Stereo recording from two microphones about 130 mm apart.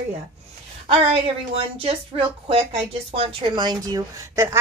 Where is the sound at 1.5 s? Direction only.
50° right (ahead or behind).